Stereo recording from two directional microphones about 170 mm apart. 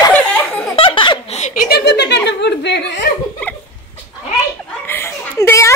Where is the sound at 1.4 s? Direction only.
60° left (ahead or behind); by 2.8 s 85° left.